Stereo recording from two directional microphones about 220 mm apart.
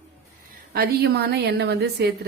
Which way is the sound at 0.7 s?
45° right (ahead or behind).